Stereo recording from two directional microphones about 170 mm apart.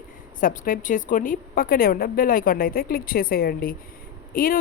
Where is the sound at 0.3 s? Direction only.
55° left (ahead or behind).